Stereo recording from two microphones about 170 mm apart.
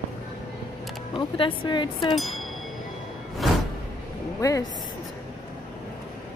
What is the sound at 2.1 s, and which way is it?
Speech, centre (ahead or behind).